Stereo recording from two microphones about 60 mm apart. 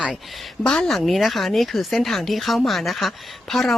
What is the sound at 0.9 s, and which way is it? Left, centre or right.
Speech, centre.